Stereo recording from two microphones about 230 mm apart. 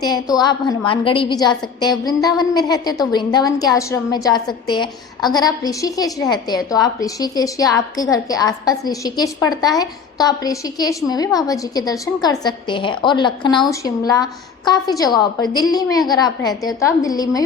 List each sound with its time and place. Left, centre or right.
0.0 s a woman's voice: centre